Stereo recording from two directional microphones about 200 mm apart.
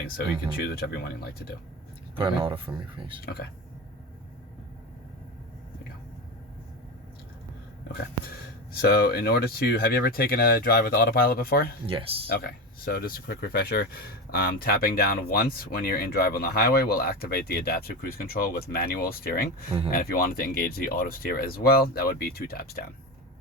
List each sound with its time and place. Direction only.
2.1 s speech: 25° right (ahead or behind)
8.7 s speech: 50° left (ahead or behind)
11.9 s speech: 25° right (ahead or behind)
12.3 s speech: 50° left (ahead or behind)